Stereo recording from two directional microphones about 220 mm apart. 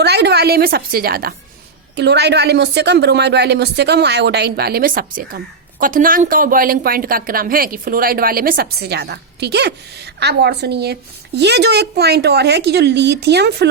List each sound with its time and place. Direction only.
0.0 s a woman's voice: 50° right (ahead or behind)